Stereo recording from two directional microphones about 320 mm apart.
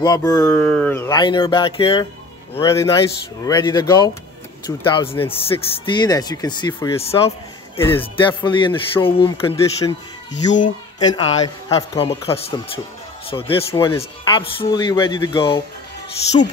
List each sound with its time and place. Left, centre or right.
0.0 s speech: centre
7.7 s speech: centre